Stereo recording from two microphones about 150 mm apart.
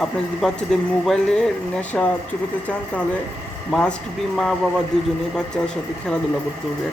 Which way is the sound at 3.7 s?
5° left (ahead or behind).